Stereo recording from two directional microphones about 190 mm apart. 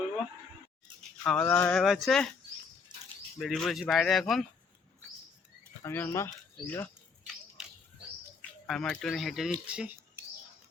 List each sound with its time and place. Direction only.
1.2 s speech: 5° left (ahead or behind)
2.9 s a sound: 20° right (ahead or behind)
3.3 s speech: centre (ahead or behind)
5.8 s speech: 10° left (ahead or behind)
8.4 s speech: centre (ahead or behind)